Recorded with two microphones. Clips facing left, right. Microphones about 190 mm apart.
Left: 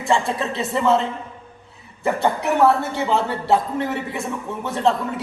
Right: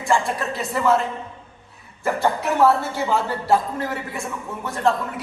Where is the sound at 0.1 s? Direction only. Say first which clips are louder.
Left 1 dB; 25° left (ahead or behind).